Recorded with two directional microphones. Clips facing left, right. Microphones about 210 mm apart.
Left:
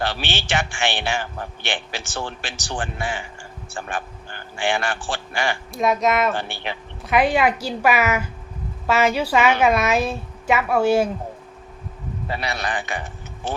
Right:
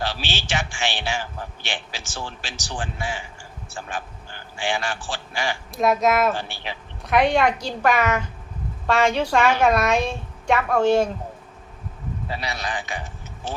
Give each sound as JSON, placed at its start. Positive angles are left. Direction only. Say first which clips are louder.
{"t": 0.0, "sound": "a man's voice", "louder": "left 3 dB", "side_deg": 55}
{"t": 5.7, "sound": "a woman's voice", "louder": "right 1 dB", "side_deg": 0}
{"t": 6.3, "sound": "a man's voice", "louder": "left 3 dB", "side_deg": 60}
{"t": 7.0, "sound": "a woman's voice", "louder": "even", "side_deg": 0}
{"t": 12.3, "sound": "a man's voice", "louder": "left 4 dB", "side_deg": 60}